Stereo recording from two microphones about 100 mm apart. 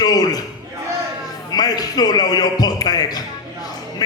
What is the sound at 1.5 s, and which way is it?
A man's voice, 40° left (ahead or behind).